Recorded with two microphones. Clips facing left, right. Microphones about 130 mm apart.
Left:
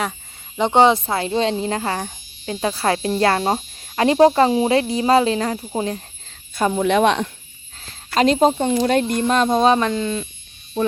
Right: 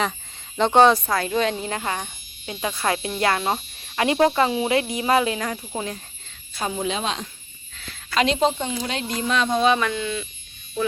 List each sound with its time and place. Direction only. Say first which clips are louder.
0.5 s speech: left 1 dB; 15° left (ahead or behind); by 6.0 s 35° left (ahead or behind)
6.5 s speech: left 8 dB; 55° left (ahead or behind)
7.8 s speech: left 4 dB; 40° left (ahead or behind)